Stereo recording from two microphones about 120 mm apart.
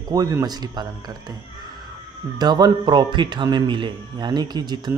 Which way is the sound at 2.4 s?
35° right (ahead or behind).